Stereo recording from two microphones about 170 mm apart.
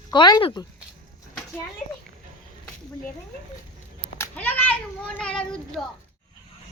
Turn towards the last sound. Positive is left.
turn(degrees=5)  # may be behind; listen again after turning